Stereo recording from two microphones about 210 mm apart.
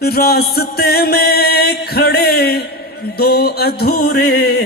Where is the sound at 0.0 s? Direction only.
50° left (ahead or behind).